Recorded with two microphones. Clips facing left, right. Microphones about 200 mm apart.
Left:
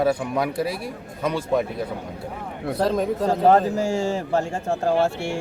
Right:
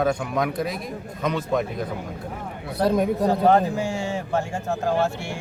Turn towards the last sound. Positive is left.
turn(degrees=35)  # may be behind; listen again after turning